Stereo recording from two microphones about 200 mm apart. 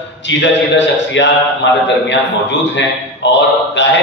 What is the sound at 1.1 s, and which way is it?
Speech, 65° left (ahead or behind).